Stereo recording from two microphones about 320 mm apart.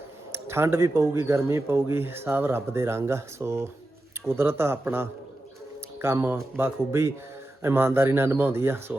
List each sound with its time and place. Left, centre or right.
0.3 s speech: centre